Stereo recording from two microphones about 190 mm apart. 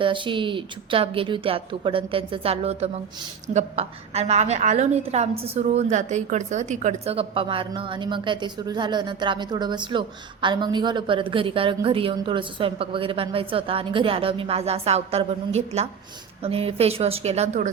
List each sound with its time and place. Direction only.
0.0 s a woman's voice: 25° right (ahead or behind)